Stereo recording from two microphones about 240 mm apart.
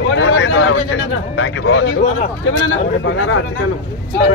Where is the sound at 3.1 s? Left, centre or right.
Left.